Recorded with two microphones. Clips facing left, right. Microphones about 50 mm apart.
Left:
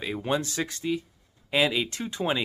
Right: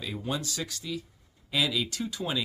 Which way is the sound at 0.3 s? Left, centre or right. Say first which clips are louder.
Left 6 dB; left.